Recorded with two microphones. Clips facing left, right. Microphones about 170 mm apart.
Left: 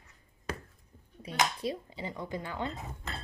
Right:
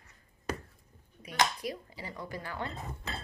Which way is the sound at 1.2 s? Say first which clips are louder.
Even; 25° left (ahead or behind).